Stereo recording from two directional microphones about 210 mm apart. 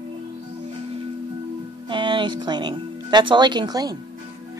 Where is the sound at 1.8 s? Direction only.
25° right (ahead or behind).